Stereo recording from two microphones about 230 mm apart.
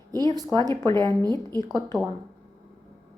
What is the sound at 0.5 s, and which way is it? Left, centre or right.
Speech, centre.